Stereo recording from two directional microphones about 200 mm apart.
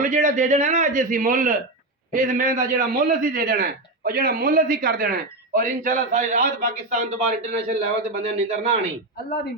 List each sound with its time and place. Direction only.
0.0 s a man's voice: 40° right (ahead or behind)